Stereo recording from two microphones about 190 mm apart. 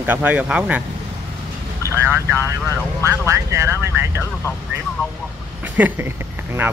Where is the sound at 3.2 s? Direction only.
15° right (ahead or behind).